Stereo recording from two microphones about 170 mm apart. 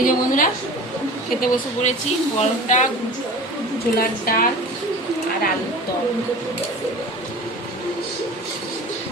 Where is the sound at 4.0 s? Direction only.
60° left (ahead or behind).